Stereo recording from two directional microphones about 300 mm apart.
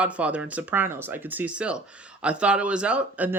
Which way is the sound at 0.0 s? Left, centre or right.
Centre.